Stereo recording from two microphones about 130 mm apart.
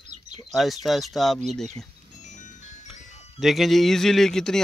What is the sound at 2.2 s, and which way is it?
Music, 70° left (ahead or behind).